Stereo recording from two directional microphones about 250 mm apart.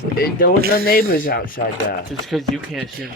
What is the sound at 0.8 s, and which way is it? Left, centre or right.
Speech, left.